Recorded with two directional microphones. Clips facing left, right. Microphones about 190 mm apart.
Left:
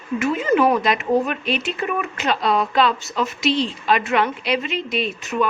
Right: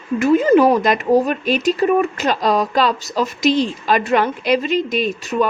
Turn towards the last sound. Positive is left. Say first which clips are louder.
# right 3 dB
turn(degrees=-40)  # may be behind; listen again after turning